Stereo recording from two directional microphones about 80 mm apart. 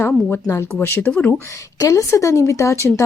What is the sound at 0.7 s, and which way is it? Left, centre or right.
Speech, left.